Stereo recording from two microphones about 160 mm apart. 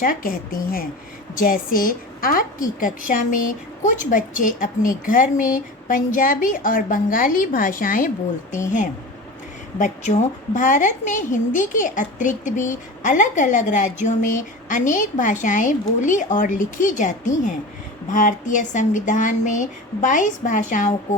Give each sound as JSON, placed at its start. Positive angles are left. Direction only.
{"t": 0.0, "sound": "a woman's voice", "side_deg": 60}
{"t": 9.7, "sound": "a woman's voice", "side_deg": 50}